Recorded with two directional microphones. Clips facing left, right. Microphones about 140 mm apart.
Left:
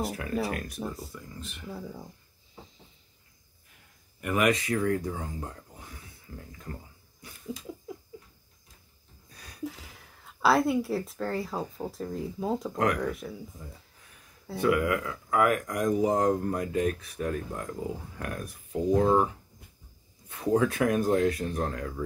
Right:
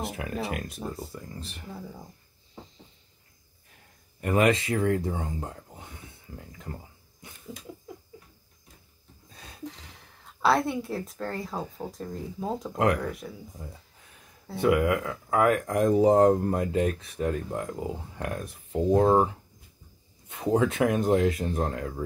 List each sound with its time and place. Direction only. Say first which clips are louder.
0.0 s speech: left 2 dB; 20° right (ahead or behind)
0.7 s speech: even; centre (ahead or behind)
1.1 s speech: right 2 dB; 35° right (ahead or behind)
4.2 s speech: right 3 dB; 30° right (ahead or behind)
9.3 s a sound: right 2 dB; 25° right (ahead or behind)
9.7 s speech: left 1 dB; 5° left (ahead or behind)
12.7 s speech: right 5 dB; 30° right (ahead or behind)
13.0 s speech: left 2 dB; centre (ahead or behind)
14.6 s speech: right 2 dB; 25° right (ahead or behind)
20.2 s speech: right 1 dB; 25° right (ahead or behind)